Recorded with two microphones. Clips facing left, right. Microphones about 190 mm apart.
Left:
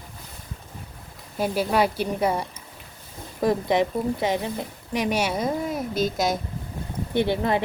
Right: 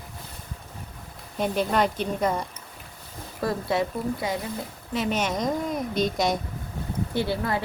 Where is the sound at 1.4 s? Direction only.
5° left (ahead or behind).